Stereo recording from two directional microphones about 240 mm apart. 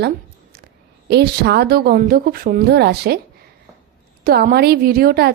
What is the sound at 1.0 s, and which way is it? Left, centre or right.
A woman's voice, right.